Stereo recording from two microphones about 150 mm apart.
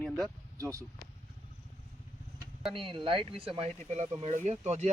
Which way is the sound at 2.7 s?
35° right (ahead or behind).